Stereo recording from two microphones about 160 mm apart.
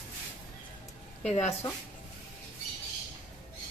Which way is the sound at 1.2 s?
45° left (ahead or behind).